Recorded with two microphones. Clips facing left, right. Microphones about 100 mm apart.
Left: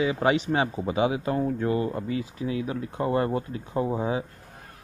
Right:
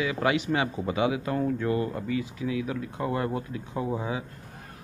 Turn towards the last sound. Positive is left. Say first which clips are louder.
# left 4 dB
turn(degrees=25)  # may be behind; listen again after turning